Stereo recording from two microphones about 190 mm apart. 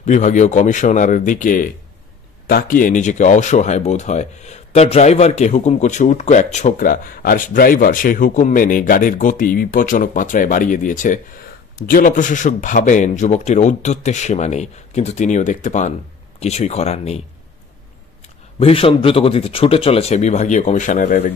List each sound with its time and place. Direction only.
0.0 s speech: 40° left (ahead or behind)
18.6 s speech: 30° left (ahead or behind)